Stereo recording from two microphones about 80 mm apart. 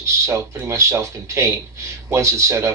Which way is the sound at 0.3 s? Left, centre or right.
Right.